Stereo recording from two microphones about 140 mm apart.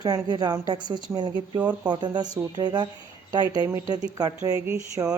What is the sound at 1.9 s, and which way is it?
Speech, 30° right (ahead or behind).